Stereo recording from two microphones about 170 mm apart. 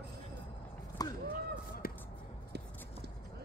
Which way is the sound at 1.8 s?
60° left (ahead or behind).